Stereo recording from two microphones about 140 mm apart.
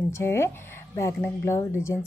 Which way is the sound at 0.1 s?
20° left (ahead or behind).